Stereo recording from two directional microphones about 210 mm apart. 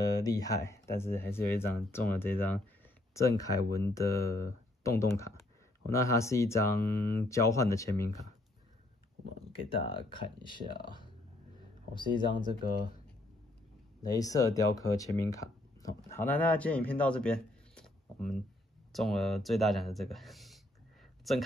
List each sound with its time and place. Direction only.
0.0 s speech: 15° left (ahead or behind)
9.7 s speech: 25° left (ahead or behind)
11.9 s speech: 20° left (ahead or behind)
14.0 s speech: 15° left (ahead or behind); by 21.4 s centre (ahead or behind)